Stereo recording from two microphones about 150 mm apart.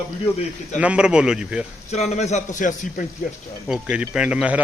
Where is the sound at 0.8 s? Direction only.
5° right (ahead or behind).